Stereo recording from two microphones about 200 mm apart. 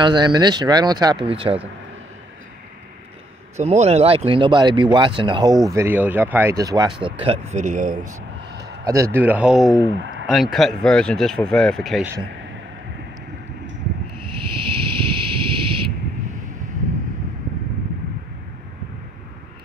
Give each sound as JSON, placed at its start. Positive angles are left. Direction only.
{"t": 0.0, "sound": "speech", "side_deg": -20}
{"t": 3.5, "sound": "speech", "side_deg": -35}
{"t": 5.7, "sound": "speech", "side_deg": -10}
{"t": 7.2, "sound": "speech", "side_deg": -35}
{"t": 7.9, "sound": "speech", "side_deg": -20}
{"t": 14.1, "sound": "a sound", "side_deg": -25}